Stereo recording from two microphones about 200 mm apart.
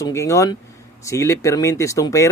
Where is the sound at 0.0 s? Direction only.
15° left (ahead or behind).